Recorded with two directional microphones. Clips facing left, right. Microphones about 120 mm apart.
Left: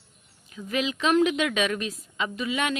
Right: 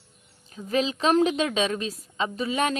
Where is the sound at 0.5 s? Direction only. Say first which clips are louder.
Right 3 dB; 35° right (ahead or behind).